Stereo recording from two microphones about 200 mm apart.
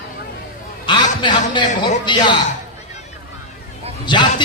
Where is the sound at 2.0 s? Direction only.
20° left (ahead or behind).